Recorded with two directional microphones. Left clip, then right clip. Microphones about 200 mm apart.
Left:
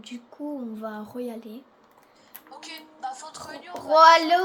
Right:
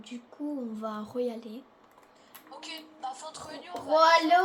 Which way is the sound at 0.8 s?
15° left (ahead or behind).